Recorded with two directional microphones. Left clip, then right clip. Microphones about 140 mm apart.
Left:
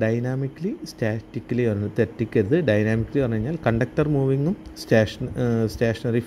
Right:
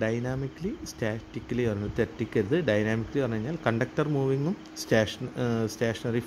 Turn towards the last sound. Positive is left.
turn(degrees=20)  # may be behind; listen again after turning